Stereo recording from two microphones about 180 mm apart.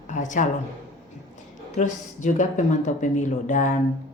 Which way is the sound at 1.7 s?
40° left (ahead or behind).